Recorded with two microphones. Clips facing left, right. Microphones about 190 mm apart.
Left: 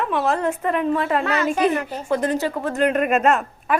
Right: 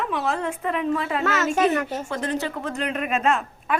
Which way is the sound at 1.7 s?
45° right (ahead or behind).